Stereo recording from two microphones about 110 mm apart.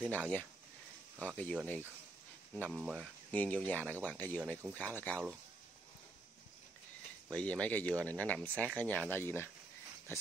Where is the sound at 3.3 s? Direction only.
15° left (ahead or behind).